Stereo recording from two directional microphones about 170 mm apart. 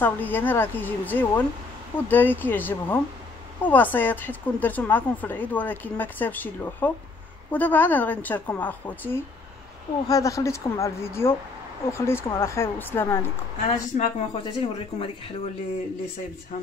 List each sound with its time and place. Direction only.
0.0 s a woman's voice: 10° left (ahead or behind)
13.7 s a woman's voice: 40° left (ahead or behind)